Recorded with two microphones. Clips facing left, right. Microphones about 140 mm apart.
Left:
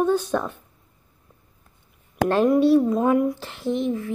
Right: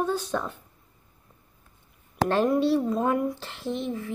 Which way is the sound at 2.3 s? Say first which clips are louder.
Left 6 dB; 10° left (ahead or behind).